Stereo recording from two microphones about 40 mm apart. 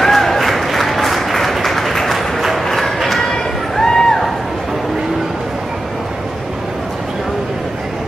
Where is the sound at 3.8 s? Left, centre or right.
Centre.